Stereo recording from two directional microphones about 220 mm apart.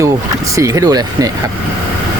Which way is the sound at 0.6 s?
15° right (ahead or behind).